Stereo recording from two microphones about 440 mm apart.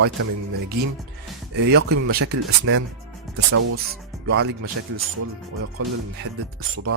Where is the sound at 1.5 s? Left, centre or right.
Right.